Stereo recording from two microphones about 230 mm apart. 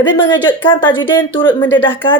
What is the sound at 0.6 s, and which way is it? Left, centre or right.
Speech, left.